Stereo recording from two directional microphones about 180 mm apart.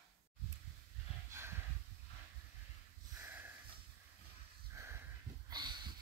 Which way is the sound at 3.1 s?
10° right (ahead or behind).